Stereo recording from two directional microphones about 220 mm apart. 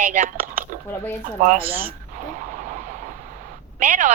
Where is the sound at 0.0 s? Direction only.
35° right (ahead or behind).